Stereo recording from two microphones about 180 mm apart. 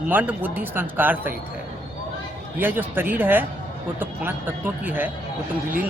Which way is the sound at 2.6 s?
10° right (ahead or behind).